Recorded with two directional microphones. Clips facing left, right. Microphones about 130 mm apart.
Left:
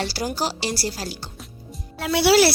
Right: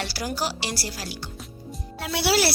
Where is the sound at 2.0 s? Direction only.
90° left.